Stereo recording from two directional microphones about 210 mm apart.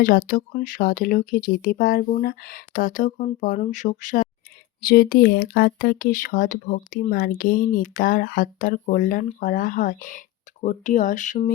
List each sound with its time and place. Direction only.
0.0 s speech: 40° left (ahead or behind)